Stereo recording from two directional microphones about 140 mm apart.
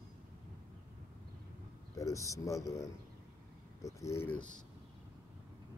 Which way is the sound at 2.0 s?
25° left (ahead or behind).